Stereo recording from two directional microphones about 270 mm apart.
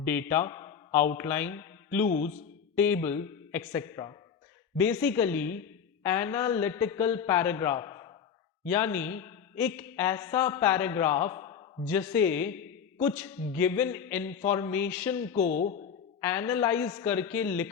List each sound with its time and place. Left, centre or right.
0.0 s a man's voice: centre
15.4 s speech: left
16.2 s speech: centre